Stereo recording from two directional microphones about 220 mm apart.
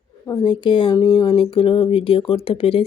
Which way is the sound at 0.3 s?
20° left (ahead or behind).